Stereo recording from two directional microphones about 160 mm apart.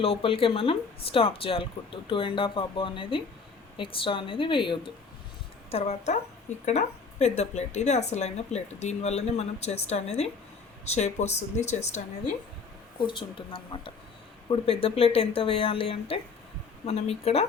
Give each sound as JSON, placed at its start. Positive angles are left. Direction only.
{"t": 0.0, "sound": "speech", "side_deg": 35}
{"t": 5.7, "sound": "speech", "side_deg": 45}
{"t": 13.0, "sound": "speech", "side_deg": 30}